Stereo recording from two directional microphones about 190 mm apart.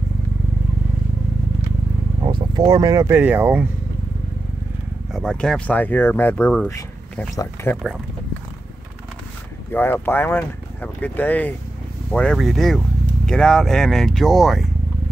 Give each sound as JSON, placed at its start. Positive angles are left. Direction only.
{"t": 2.2, "sound": "speech", "side_deg": -25}
{"t": 5.1, "sound": "speech", "side_deg": 5}
{"t": 9.7, "sound": "speech", "side_deg": 10}